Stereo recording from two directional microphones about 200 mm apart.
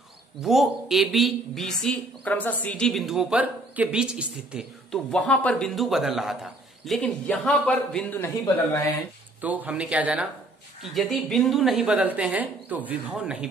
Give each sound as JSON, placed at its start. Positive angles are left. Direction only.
{"t": 0.4, "sound": "a woman's voice", "side_deg": 0}
{"t": 9.4, "sound": "a woman's voice", "side_deg": -10}